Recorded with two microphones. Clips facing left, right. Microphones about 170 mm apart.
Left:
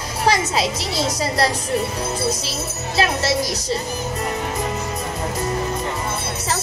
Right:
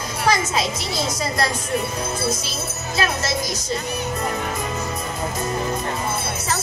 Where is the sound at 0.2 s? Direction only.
35° left (ahead or behind).